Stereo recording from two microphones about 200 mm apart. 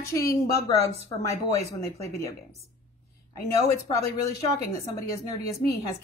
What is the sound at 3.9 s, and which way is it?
A woman's voice, 15° left (ahead or behind).